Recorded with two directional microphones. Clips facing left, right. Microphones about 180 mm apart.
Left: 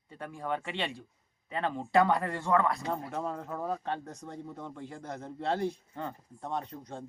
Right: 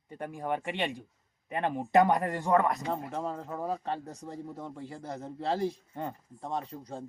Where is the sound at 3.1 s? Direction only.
Centre (ahead or behind).